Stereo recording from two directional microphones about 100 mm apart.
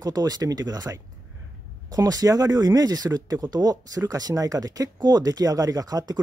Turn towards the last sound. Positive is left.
turn(degrees=-40)  # may be behind; listen again after turning